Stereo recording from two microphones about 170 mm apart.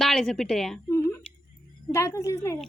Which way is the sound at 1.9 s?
15° left (ahead or behind).